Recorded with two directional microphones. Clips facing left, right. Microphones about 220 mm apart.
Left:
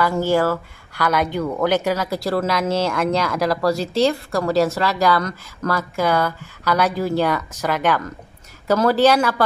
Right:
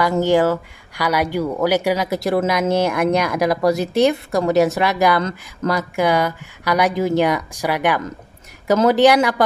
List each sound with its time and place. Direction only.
0.0 s speech: 15° right (ahead or behind)